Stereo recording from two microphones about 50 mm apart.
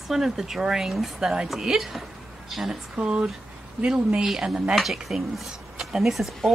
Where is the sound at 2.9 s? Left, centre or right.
Centre.